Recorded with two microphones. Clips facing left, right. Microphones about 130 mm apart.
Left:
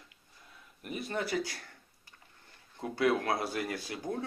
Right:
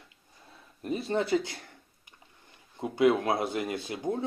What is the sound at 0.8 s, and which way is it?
Speech, 30° right (ahead or behind).